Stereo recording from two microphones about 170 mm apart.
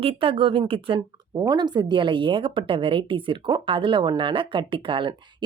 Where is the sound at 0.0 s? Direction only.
30° right (ahead or behind).